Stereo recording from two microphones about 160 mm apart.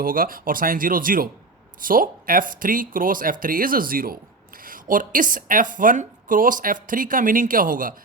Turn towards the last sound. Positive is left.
turn(degrees=-60)  # may be behind; listen again after turning